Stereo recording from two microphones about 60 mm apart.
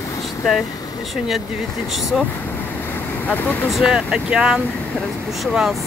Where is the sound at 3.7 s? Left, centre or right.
Centre.